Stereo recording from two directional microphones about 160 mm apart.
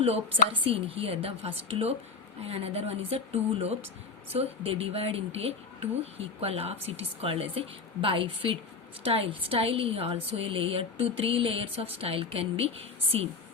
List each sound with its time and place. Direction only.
0.6 s a woman's voice: 35° right (ahead or behind)